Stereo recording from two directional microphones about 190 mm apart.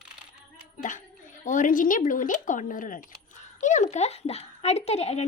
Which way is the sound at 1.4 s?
45° left (ahead or behind).